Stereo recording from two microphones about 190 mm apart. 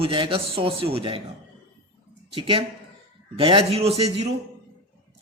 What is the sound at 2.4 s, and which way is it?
A man's voice, 25° right (ahead or behind).